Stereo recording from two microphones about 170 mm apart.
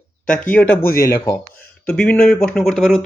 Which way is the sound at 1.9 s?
5° left (ahead or behind).